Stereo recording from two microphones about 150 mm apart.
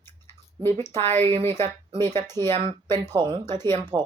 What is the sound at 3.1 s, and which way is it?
Speech, 30° right (ahead or behind).